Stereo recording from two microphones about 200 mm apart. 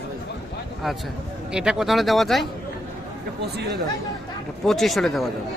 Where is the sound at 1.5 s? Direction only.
5° right (ahead or behind).